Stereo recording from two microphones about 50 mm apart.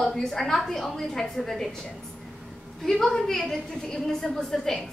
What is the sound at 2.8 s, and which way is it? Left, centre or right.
A woman's voice, centre.